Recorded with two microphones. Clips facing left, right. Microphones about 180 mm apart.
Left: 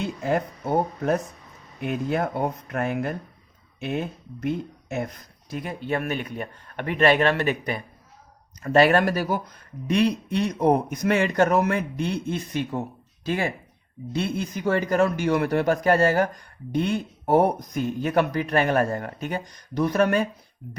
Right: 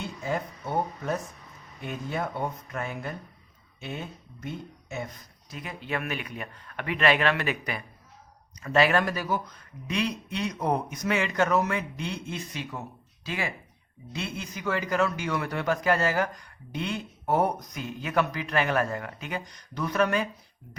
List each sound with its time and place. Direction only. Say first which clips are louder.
0.2 s speech: left 6 dB; 55° left (ahead or behind)
1.8 s speech: left 7 dB; 65° left (ahead or behind)
2.2 s speech: left 5 dB; 50° left (ahead or behind); by 7.9 s 30° left (ahead or behind)
8.6 s speech: left 5 dB; 50° left (ahead or behind)
9.9 s speech: left 8 dB; 50° left (ahead or behind); by 20.0 s 35° left (ahead or behind)
20.0 s speech: left 3 dB; 45° left (ahead or behind)